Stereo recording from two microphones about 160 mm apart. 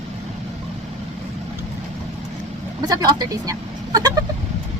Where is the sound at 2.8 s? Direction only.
25° right (ahead or behind).